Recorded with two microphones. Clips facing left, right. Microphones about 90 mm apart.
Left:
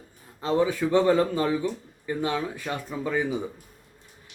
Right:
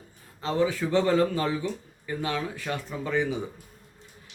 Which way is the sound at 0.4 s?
20° left (ahead or behind).